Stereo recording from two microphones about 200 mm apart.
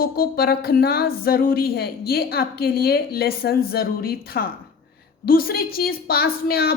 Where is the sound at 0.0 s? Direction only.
50° left (ahead or behind).